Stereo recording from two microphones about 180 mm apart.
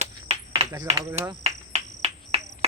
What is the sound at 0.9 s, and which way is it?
Speech, 35° right (ahead or behind).